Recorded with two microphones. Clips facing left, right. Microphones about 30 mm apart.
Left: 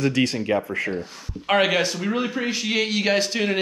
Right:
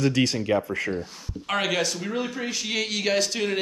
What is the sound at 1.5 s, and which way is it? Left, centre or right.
Speech, left.